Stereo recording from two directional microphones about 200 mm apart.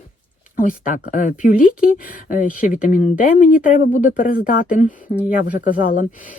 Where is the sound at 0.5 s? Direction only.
40° left (ahead or behind).